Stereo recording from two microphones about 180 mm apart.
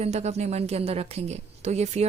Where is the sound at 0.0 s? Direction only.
40° right (ahead or behind).